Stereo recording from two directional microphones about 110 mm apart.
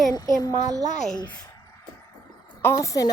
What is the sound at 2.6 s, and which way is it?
Speech, 30° left (ahead or behind).